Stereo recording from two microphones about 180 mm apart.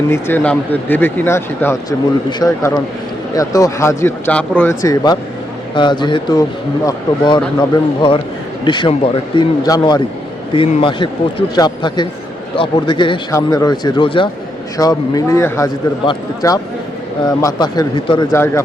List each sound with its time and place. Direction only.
0.1 s a man's voice: 10° left (ahead or behind)
8.6 s a man's voice: 25° left (ahead or behind)
18.3 s speech: 15° left (ahead or behind)